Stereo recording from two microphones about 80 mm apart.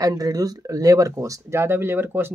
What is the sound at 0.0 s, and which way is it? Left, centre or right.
Speech, right.